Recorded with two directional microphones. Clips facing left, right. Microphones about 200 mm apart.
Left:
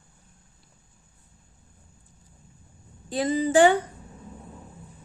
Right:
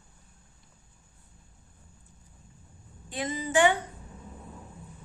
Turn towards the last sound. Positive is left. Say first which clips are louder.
# left 6 dB
turn(degrees=35)  # may be behind; listen again after turning